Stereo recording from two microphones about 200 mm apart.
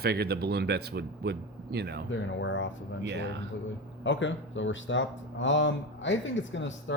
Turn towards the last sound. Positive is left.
turn(degrees=65)  # may be behind; listen again after turning